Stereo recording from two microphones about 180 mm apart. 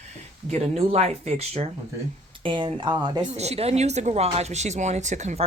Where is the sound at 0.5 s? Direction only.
35° right (ahead or behind).